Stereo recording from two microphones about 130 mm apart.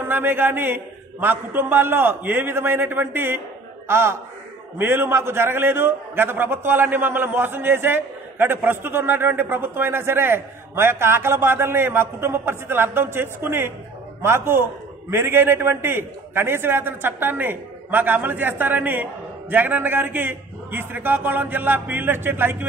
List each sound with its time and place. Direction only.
0.0 s a man's voice: 15° right (ahead or behind)